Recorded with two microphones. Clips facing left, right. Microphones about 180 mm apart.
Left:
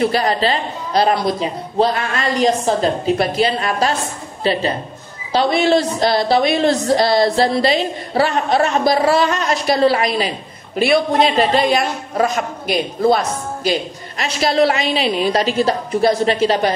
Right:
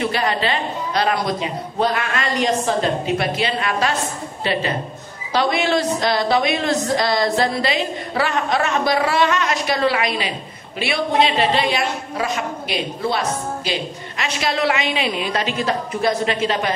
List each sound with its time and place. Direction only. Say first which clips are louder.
0.0 s a woman's voice: left 4 dB; 35° left (ahead or behind)